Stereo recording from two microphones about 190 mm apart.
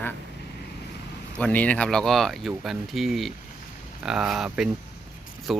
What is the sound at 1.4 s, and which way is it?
Speech, 10° left (ahead or behind).